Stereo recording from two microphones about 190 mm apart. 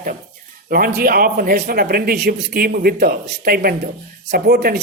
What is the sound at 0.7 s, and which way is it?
Speech, 50° right (ahead or behind).